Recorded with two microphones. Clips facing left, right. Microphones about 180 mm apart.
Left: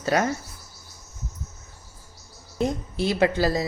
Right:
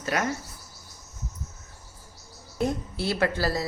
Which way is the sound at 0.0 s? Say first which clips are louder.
Left 5 dB; 30° left (ahead or behind).